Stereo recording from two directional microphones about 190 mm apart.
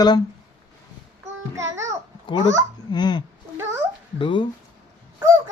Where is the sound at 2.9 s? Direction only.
25° left (ahead or behind).